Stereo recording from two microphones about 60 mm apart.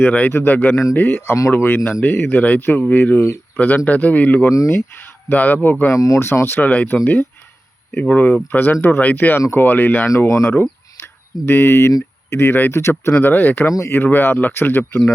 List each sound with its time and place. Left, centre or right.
0.0 s a man's voice: left
1.3 s a man's voice: left
4.4 s speech: left
5.3 s speech: left
5.9 s speech: left
6.1 s a man's voice: left
10.1 s speech: left
10.5 s a sound: left
12.3 s speech: left
13.3 s speech: left